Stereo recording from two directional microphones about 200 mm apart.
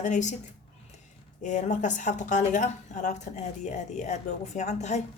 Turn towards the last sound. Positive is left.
turn(degrees=35)  # may be behind; listen again after turning